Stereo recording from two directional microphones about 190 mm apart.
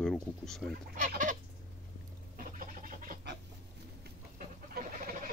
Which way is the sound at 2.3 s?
45° right (ahead or behind).